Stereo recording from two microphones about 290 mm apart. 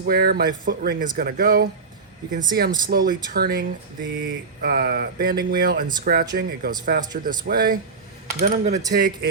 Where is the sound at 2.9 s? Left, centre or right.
Right.